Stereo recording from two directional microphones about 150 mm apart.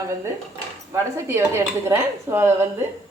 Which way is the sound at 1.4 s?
15° right (ahead or behind).